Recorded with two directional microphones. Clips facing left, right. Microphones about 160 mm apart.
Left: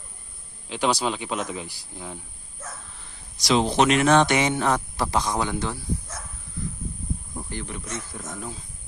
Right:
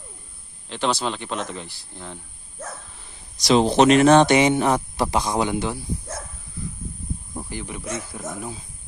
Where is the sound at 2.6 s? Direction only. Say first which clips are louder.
Right 5 dB; 60° right (ahead or behind).